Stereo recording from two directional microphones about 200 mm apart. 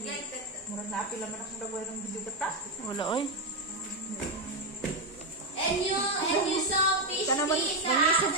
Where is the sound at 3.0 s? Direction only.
25° left (ahead or behind).